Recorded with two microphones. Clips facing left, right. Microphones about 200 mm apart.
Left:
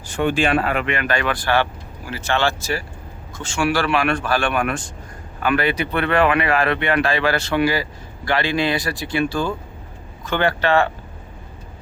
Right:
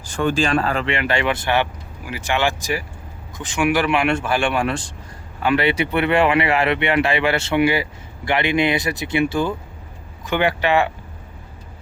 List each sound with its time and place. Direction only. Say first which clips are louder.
0.3 s speech: even; 40° right (ahead or behind); by 10.9 s 15° right (ahead or behind)